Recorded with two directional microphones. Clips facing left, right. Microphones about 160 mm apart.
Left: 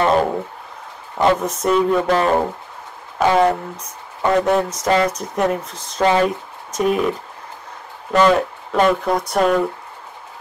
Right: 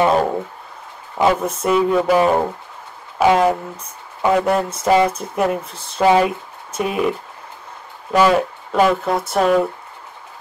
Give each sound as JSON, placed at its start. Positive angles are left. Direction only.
{"t": 1.1, "sound": "speech", "side_deg": -5}
{"t": 8.1, "sound": "speech", "side_deg": -5}